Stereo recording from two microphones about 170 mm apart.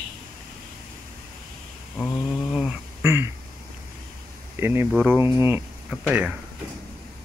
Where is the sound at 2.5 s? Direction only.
5° right (ahead or behind).